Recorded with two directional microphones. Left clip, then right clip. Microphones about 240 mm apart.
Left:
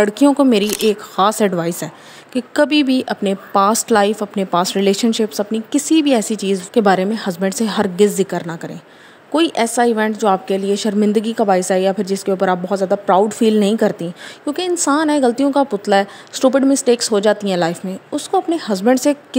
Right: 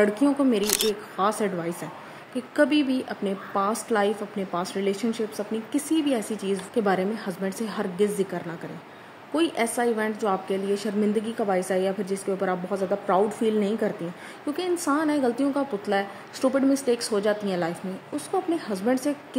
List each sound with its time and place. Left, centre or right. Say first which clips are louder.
0.0 s speech: left 9 dB; left
0.7 s speech: left 8 dB; centre
1.1 s speech: left 11 dB; left